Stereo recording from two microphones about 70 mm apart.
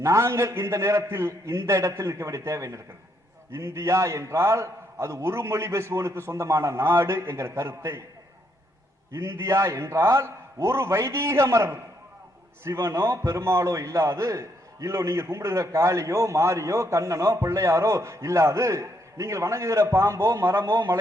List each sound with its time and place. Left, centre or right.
0.0 s a man's voice: right
9.1 s a man's voice: right